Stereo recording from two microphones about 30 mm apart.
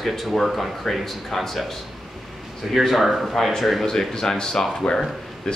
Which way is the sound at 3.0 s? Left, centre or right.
Centre.